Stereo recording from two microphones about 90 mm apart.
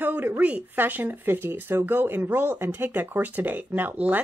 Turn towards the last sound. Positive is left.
turn(degrees=-20)  # may be behind; listen again after turning